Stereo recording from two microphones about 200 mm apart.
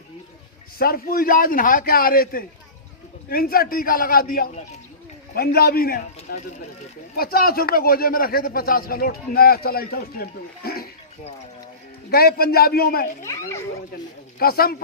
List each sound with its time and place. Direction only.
0.8 s speech: 45° left (ahead or behind)
12.1 s speech: 50° left (ahead or behind)
13.2 s a child's voice: 15° left (ahead or behind)
14.3 s speech: 50° left (ahead or behind)